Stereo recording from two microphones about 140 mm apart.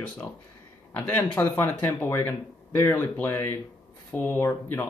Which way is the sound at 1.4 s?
15° left (ahead or behind).